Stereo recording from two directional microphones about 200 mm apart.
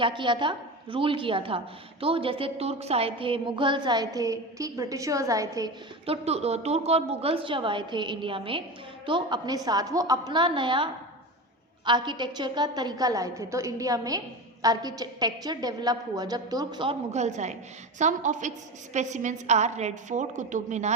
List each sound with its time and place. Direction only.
0.0 s a woman's voice: 25° right (ahead or behind)
6.1 s a woman's voice: 30° right (ahead or behind)
11.9 s a woman's voice: 20° right (ahead or behind); by 20.9 s 35° right (ahead or behind)